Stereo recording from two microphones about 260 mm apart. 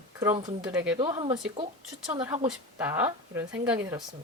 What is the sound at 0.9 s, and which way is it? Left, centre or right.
Speech, centre.